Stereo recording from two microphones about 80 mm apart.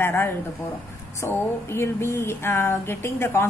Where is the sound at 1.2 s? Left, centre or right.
Left.